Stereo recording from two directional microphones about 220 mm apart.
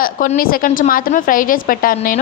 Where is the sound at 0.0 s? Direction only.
40° left (ahead or behind).